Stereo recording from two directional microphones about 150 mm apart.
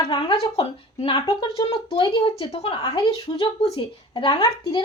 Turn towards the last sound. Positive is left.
turn(degrees=30)  # may be behind; listen again after turning